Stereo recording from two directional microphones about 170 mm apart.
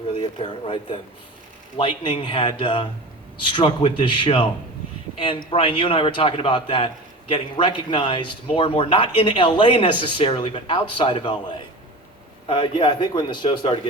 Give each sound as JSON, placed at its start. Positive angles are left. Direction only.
{"t": 0.2, "sound": "a man's voice", "side_deg": 30}
{"t": 12.5, "sound": "a man's voice", "side_deg": 30}